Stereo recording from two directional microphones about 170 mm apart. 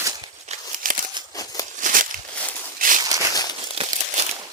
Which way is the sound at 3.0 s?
20° right (ahead or behind).